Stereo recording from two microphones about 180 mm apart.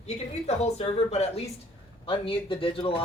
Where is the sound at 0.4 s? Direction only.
35° left (ahead or behind).